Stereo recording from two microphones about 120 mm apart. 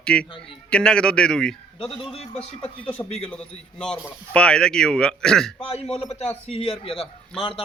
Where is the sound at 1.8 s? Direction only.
55° left (ahead or behind).